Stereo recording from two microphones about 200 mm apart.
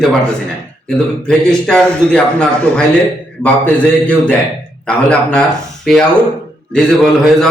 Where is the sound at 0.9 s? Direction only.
5° left (ahead or behind).